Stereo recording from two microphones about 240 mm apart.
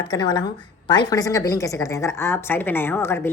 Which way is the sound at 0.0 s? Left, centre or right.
Centre.